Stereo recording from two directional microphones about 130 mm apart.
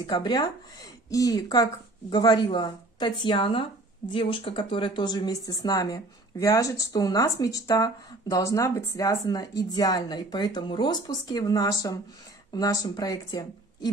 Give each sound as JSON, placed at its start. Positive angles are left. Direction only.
{"t": 0.0, "sound": "speech", "side_deg": 30}